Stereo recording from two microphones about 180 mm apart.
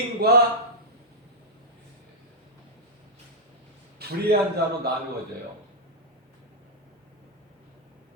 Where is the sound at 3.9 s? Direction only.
60° right (ahead or behind).